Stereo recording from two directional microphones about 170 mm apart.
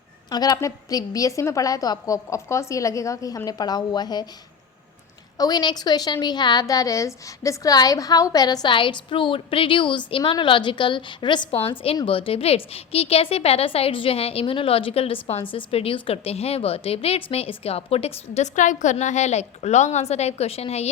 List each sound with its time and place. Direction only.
0.3 s a woman's voice: 25° left (ahead or behind)
5.4 s a woman's voice: 25° left (ahead or behind)